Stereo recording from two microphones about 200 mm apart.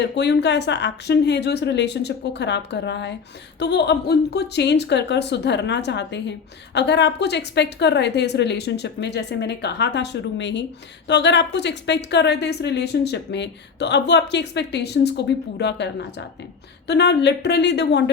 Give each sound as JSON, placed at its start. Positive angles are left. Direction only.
{"t": 0.0, "sound": "a woman's voice", "side_deg": 60}